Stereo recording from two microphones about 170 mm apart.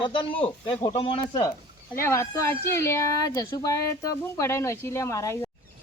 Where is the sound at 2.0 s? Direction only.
15° left (ahead or behind).